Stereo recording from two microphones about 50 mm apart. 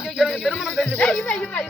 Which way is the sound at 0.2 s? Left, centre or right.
Centre.